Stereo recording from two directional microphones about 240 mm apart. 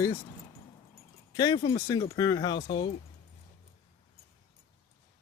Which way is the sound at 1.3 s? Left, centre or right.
Centre.